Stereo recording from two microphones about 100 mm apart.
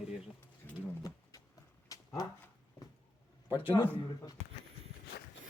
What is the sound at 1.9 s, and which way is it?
Dog, 35° left (ahead or behind).